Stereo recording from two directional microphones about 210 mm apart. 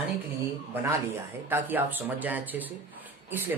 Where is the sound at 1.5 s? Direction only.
10° right (ahead or behind).